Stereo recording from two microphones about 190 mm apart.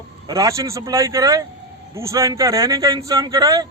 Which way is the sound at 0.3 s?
15° right (ahead or behind).